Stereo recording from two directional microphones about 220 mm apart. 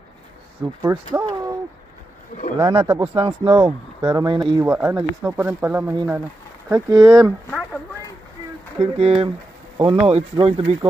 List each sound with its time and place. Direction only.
0.8 s speech: 15° right (ahead or behind)
2.8 s speech: 10° right (ahead or behind)
3.2 s speech: 25° right (ahead or behind)
4.6 s speech: 10° right (ahead or behind)
8.9 s speech: 25° right (ahead or behind)